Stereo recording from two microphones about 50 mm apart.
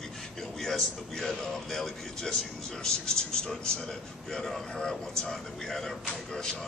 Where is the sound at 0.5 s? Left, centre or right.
Centre.